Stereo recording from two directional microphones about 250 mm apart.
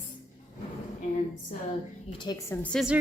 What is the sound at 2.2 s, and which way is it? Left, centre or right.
Speech, centre.